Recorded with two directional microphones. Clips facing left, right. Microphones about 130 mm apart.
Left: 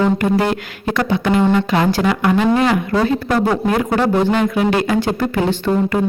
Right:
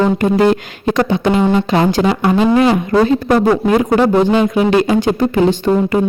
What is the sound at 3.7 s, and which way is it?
Speech, 20° right (ahead or behind).